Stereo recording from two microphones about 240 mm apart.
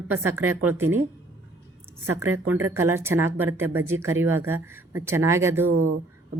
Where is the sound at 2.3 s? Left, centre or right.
Centre.